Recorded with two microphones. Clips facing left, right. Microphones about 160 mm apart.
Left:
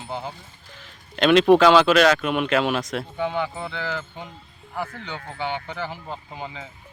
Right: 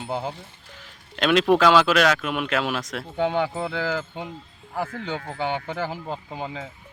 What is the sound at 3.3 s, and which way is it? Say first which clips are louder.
Speech: right 3 dB; 45° right (ahead or behind).